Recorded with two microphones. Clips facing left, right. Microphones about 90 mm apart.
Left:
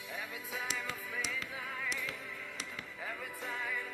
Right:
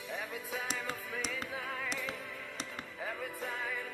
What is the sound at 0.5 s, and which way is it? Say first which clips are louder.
Music: right 1 dB; 55° right (ahead or behind).